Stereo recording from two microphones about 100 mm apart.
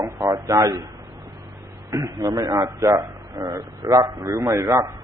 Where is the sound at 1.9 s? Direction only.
30° right (ahead or behind).